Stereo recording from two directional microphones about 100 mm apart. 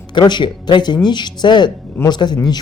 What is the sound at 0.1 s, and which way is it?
Speech, 50° left (ahead or behind).